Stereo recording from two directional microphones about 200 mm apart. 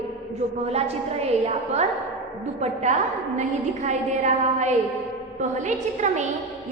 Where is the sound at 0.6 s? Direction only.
30° right (ahead or behind).